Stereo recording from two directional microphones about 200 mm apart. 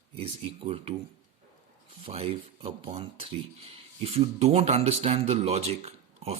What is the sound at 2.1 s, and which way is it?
Speech, 30° right (ahead or behind).